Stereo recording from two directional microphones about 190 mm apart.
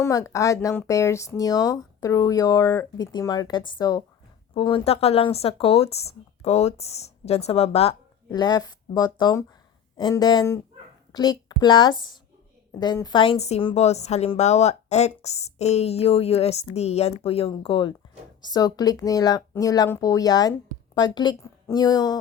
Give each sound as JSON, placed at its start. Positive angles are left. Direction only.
{"t": 0.0, "sound": "speech", "side_deg": 15}